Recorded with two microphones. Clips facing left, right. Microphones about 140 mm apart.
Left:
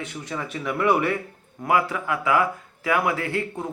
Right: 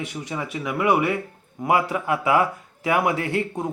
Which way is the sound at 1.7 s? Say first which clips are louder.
Right 2 dB; 20° right (ahead or behind).